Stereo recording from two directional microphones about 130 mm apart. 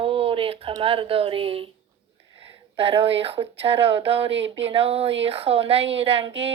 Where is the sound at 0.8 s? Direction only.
45° right (ahead or behind).